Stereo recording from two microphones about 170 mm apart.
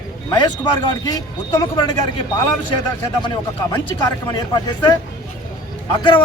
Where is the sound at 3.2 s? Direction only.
25° left (ahead or behind).